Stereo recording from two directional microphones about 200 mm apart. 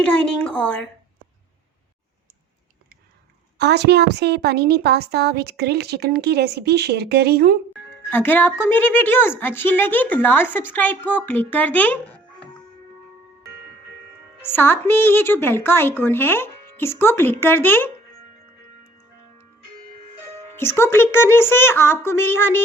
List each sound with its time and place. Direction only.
0.0 s a woman's voice: 5° left (ahead or behind)
3.6 s a woman's voice: 55° right (ahead or behind)
8.1 s a woman's voice: 10° left (ahead or behind)
14.4 s a woman's voice: 10° left (ahead or behind)
20.6 s a woman's voice: 10° left (ahead or behind)